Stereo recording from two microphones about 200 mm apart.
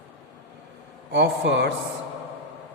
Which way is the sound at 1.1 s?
60° right (ahead or behind).